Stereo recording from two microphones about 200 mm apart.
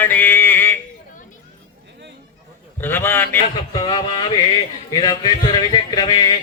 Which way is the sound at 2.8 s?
10° left (ahead or behind).